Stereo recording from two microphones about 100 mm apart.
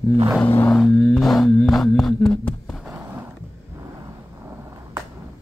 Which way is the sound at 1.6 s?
Centre (ahead or behind).